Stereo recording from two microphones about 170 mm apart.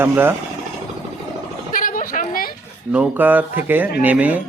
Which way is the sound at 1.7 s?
55° left (ahead or behind).